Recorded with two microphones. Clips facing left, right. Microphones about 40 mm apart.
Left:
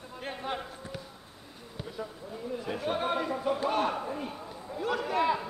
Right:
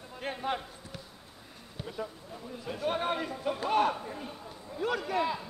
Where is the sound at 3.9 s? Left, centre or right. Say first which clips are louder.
Left 4 dB; left.